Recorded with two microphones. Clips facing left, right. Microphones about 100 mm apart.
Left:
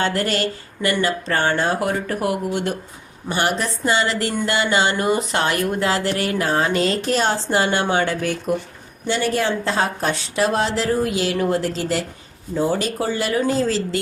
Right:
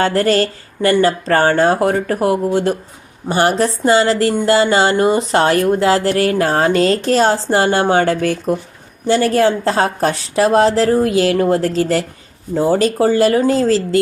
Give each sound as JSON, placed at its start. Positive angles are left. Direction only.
{"t": 0.0, "sound": "speech", "side_deg": -35}